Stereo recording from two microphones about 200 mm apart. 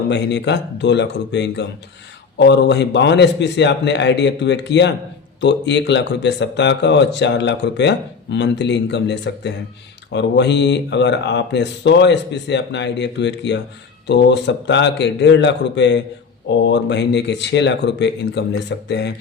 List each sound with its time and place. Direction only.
0.1 s a man's voice: 60° left (ahead or behind)